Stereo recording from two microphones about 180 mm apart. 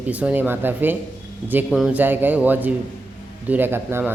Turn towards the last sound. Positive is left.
turn(degrees=-10)  # may be behind; listen again after turning